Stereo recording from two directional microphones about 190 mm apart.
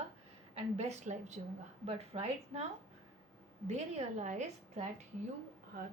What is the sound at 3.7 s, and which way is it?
A woman's voice, 35° right (ahead or behind).